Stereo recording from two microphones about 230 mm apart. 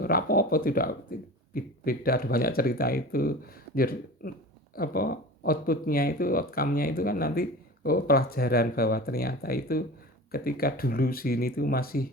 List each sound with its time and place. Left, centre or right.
0.0 s speech: left